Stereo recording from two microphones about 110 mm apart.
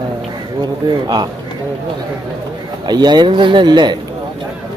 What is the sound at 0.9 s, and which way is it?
Speech, 40° right (ahead or behind).